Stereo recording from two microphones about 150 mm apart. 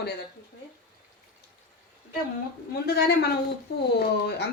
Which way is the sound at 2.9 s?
90° left.